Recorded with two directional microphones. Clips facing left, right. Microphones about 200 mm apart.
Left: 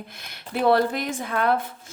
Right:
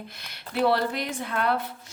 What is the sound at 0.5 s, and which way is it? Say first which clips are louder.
Speech: left 3 dB; 50° left (ahead or behind).